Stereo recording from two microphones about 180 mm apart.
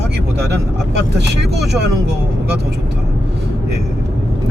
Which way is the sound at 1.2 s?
65° right (ahead or behind).